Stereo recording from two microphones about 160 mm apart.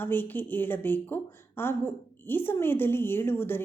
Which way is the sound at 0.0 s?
10° left (ahead or behind).